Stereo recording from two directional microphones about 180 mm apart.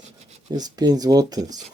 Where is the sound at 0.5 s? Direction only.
20° right (ahead or behind).